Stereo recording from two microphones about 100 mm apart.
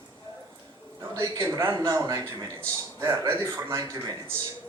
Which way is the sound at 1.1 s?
35° right (ahead or behind).